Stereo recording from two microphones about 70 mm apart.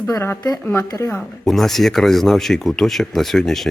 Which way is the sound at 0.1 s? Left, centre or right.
Left.